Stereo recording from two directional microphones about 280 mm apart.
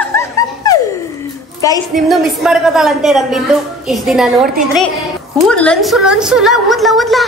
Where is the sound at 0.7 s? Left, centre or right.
Centre.